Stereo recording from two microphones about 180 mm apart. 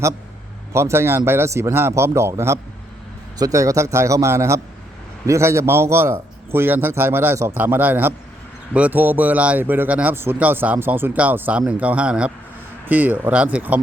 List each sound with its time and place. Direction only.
0.7 s speech: 15° right (ahead or behind)